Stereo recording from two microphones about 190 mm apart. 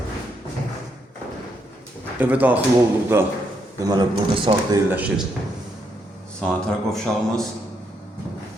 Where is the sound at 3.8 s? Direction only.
20° right (ahead or behind).